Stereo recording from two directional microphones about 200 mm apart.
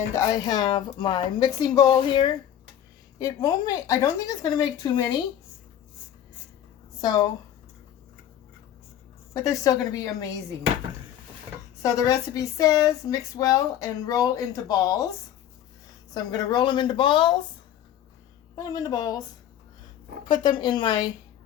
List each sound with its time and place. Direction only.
0.1 s a woman's voice: 15° left (ahead or behind)
9.3 s speech: 15° left (ahead or behind)
11.8 s speech: 15° left (ahead or behind)
16.1 s a woman's voice: 20° left (ahead or behind)
18.5 s a woman's voice: 20° left (ahead or behind)
20.2 s a woman's voice: 20° left (ahead or behind)